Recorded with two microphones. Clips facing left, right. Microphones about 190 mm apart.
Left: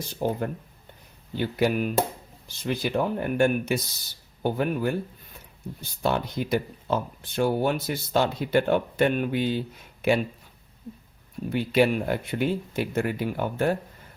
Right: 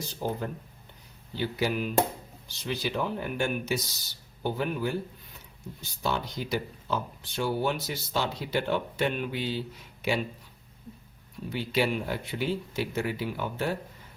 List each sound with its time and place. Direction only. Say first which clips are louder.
0.2 s speech: left 5 dB; 55° left (ahead or behind)
6.0 s speech: left 5 dB; 55° left (ahead or behind)
11.4 s speech: left 6 dB; 55° left (ahead or behind)